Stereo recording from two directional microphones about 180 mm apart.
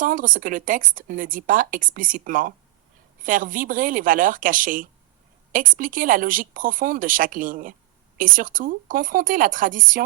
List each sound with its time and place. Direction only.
0.0 s a woman's voice: 50° right (ahead or behind)